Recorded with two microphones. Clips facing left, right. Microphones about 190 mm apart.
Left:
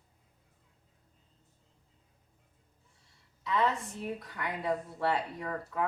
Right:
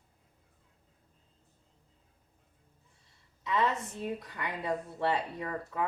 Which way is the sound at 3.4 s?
20° right (ahead or behind).